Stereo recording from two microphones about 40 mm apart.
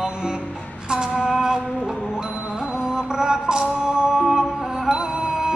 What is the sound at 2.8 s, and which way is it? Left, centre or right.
Music, centre.